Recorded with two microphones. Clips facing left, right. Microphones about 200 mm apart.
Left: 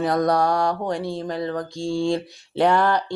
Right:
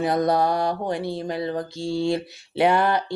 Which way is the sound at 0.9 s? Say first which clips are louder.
Even; 5° right (ahead or behind).